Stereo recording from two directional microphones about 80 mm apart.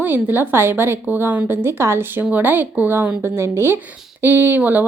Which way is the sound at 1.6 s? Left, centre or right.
Right.